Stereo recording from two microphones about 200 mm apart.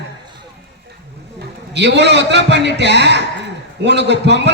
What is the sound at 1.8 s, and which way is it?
A man's voice, 60° right (ahead or behind).